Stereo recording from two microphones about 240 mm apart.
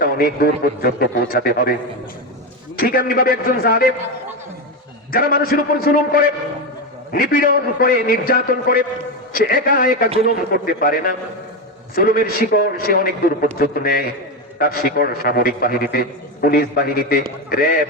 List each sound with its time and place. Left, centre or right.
0.8 s a man's voice: left
2.7 s a man's voice: left
5.1 s a man's voice: left